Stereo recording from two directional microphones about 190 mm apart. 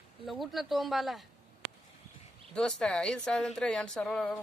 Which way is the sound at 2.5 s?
5° left (ahead or behind).